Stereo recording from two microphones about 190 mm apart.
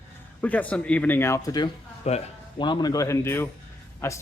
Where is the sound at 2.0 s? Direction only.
35° left (ahead or behind).